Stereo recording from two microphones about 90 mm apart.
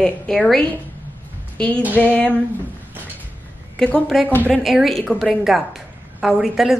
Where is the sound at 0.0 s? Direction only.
5° left (ahead or behind).